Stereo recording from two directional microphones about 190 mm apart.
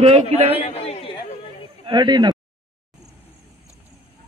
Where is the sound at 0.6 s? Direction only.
30° left (ahead or behind).